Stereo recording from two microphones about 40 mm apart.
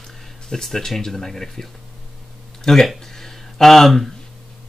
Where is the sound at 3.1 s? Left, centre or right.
Centre.